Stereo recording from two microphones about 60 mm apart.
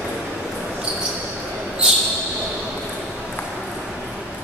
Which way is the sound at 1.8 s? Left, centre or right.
Centre.